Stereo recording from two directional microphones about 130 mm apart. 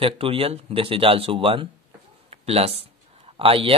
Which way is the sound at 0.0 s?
45° right (ahead or behind).